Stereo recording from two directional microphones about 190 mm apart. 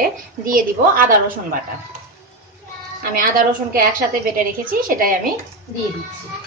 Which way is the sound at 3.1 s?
50° right (ahead or behind).